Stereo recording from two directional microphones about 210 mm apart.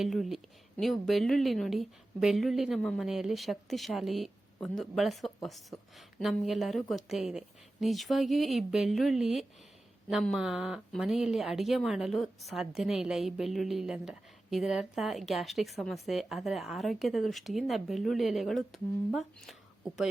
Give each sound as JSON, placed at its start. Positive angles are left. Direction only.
{"t": 0.0, "sound": "speech", "side_deg": 0}